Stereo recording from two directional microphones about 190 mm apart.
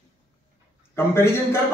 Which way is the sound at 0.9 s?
15° left (ahead or behind).